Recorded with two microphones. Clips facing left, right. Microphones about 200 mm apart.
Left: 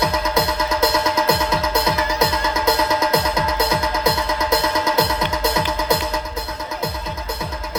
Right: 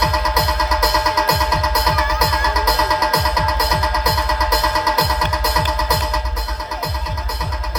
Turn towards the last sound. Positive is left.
turn(degrees=25)  # may be behind; listen again after turning